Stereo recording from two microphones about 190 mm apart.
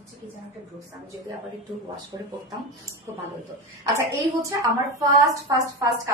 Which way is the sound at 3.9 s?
15° right (ahead or behind).